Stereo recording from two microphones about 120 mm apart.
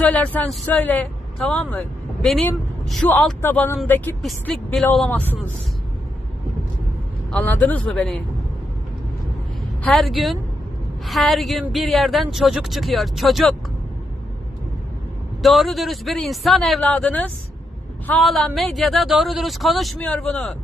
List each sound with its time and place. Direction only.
0.0 s speech: 15° left (ahead or behind)
7.3 s speech: 10° left (ahead or behind)
9.8 s speech: centre (ahead or behind)
15.4 s speech: centre (ahead or behind)
16.8 s speech: 10° left (ahead or behind)
20.0 s speech: 10° left (ahead or behind)